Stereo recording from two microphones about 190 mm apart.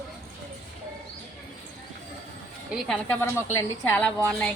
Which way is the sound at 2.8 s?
10° left (ahead or behind).